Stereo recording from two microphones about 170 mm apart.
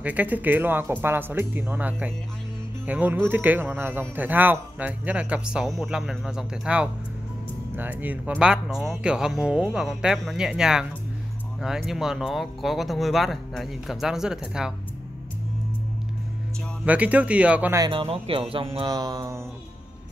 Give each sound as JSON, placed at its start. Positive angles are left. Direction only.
{"t": 0.0, "sound": "speech", "side_deg": -10}
{"t": 16.8, "sound": "speech", "side_deg": -10}
{"t": 17.8, "sound": "speech", "side_deg": -30}